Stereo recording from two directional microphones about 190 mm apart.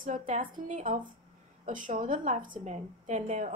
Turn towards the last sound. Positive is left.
turn(degrees=-40)  # may be behind; listen again after turning